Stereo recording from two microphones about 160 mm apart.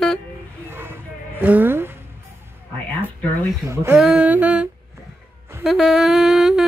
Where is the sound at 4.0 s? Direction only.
10° right (ahead or behind).